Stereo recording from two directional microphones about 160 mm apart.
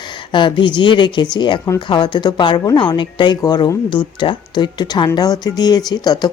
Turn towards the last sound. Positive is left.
turn(degrees=25)  # may be behind; listen again after turning